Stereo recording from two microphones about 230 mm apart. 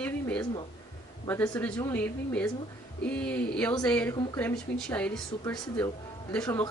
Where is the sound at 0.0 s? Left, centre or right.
Centre.